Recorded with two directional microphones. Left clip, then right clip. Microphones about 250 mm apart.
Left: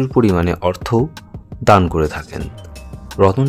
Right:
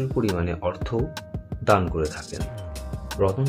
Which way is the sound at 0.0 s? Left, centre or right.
Left.